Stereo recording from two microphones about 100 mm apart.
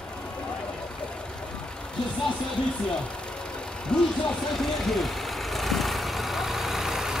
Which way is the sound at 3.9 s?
10° left (ahead or behind).